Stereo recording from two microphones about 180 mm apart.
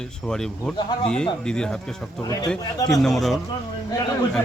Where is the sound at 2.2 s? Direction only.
20° left (ahead or behind).